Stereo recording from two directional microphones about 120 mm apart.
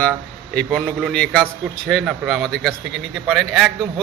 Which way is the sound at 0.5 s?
10° left (ahead or behind).